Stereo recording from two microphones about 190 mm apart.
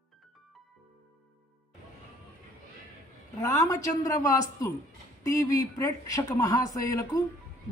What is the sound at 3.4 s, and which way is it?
Speech, 15° left (ahead or behind).